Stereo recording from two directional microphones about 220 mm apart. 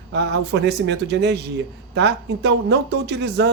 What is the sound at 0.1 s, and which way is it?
Speech, 50° right (ahead or behind).